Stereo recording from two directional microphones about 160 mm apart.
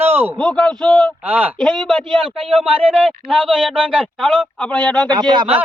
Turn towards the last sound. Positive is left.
turn(degrees=-30)  # may be behind; listen again after turning